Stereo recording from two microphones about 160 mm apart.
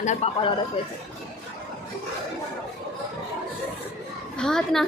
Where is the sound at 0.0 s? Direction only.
45° left (ahead or behind).